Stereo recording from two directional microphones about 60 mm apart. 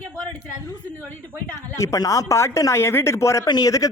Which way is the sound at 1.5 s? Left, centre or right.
Left.